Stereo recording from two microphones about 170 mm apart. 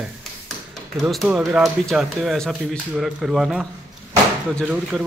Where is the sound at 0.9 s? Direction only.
Centre (ahead or behind).